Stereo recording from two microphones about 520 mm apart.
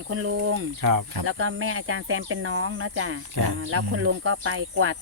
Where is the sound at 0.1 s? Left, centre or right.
Right.